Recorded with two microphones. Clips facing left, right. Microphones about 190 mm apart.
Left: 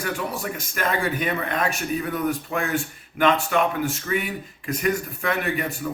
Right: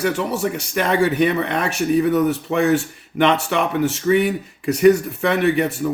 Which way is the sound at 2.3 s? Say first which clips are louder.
Right 8 dB; 75° right (ahead or behind).